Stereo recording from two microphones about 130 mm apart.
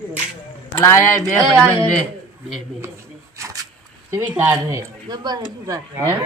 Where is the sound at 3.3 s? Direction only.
25° right (ahead or behind).